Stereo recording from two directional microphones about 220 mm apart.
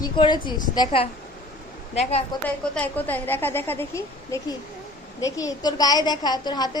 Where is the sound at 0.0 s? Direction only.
20° left (ahead or behind).